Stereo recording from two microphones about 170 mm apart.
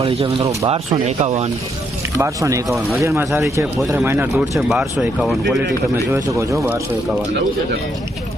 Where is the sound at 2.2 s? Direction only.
20° right (ahead or behind).